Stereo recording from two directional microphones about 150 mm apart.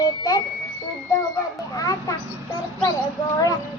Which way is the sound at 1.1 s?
25° left (ahead or behind).